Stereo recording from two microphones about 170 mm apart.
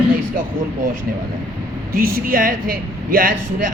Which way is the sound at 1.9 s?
60° right (ahead or behind).